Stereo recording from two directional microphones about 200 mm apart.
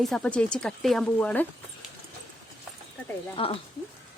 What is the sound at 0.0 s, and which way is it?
Speech, 5° left (ahead or behind).